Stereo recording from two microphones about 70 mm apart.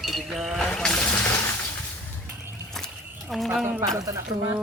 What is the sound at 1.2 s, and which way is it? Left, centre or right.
Water, left.